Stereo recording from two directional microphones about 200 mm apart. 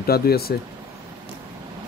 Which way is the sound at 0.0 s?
50° left (ahead or behind).